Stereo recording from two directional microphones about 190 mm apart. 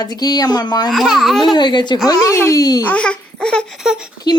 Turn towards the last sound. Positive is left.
turn(degrees=-5)  # may be behind; listen again after turning